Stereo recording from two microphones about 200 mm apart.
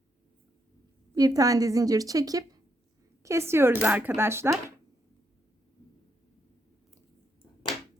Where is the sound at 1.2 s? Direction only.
20° right (ahead or behind).